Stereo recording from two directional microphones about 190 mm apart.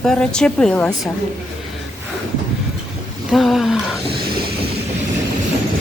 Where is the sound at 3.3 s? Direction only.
Centre (ahead or behind).